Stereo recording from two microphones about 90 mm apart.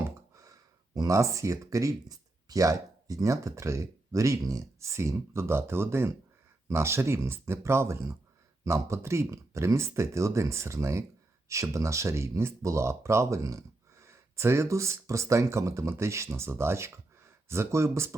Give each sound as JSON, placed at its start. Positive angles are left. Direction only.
{"t": 0.9, "sound": "speech", "side_deg": -40}